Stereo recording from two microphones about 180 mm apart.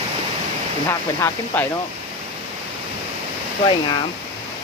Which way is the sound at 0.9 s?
15° left (ahead or behind).